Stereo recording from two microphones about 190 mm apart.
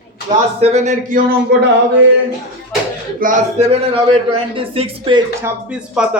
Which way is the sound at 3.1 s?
45° right (ahead or behind).